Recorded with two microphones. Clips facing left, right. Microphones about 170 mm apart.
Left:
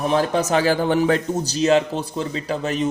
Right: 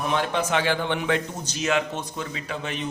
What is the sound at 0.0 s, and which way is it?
A man's voice, 35° left (ahead or behind).